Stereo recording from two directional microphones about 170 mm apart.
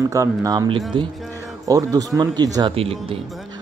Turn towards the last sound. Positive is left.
turn(degrees=-35)  # may be behind; listen again after turning